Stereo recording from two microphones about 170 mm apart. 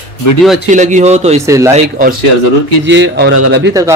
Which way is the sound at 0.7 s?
45° right (ahead or behind).